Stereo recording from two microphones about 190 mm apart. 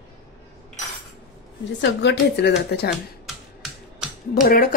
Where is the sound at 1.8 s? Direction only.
70° left (ahead or behind).